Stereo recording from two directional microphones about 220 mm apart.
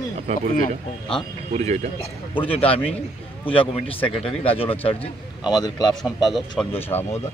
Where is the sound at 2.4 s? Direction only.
25° left (ahead or behind).